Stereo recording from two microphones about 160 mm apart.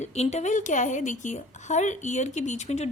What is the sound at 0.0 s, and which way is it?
A woman's voice, 45° left (ahead or behind).